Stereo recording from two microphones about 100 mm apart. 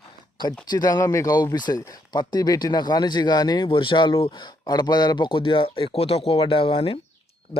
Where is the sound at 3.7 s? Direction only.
55° left (ahead or behind).